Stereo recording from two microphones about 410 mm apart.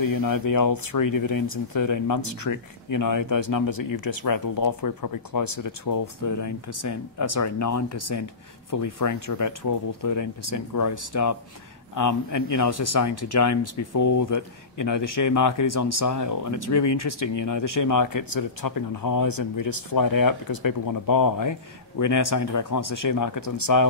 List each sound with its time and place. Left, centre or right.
0.0 s speech: left